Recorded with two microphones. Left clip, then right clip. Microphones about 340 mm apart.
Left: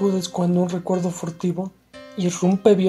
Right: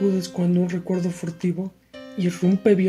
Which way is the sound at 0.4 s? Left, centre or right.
Left.